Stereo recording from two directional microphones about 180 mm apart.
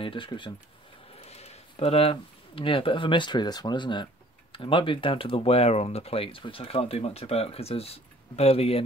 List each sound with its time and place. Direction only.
0.0 s speech: 30° left (ahead or behind)